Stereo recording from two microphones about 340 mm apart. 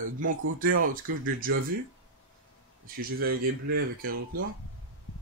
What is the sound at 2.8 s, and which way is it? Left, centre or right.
Speech, right.